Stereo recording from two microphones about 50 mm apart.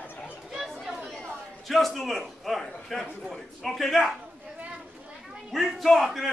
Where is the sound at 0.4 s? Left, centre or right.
Centre.